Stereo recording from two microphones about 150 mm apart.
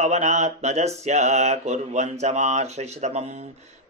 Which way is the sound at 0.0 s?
50° right (ahead or behind).